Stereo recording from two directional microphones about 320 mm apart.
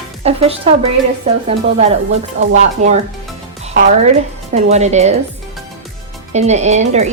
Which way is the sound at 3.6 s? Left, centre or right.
Right.